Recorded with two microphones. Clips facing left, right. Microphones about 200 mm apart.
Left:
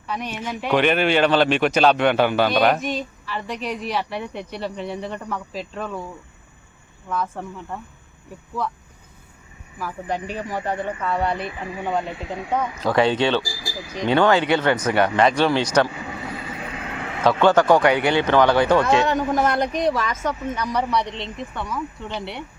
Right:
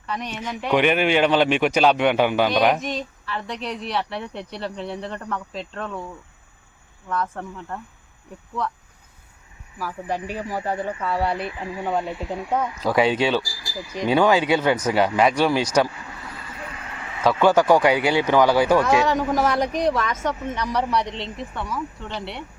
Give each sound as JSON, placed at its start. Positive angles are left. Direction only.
{"t": 0.1, "sound": "speech", "side_deg": 5}
{"t": 0.8, "sound": "a man's voice", "side_deg": -15}
{"t": 2.7, "sound": "speech", "side_deg": 5}
{"t": 7.1, "sound": "speech", "side_deg": 5}
{"t": 9.7, "sound": "a man's voice", "side_deg": -5}
{"t": 16.0, "sound": "vehicle", "side_deg": 70}
{"t": 17.2, "sound": "speech", "side_deg": -10}